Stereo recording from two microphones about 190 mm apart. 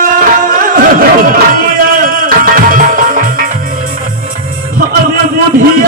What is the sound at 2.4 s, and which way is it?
Tabla, 45° right (ahead or behind).